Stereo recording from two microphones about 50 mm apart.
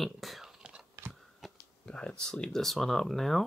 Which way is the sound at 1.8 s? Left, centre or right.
Centre.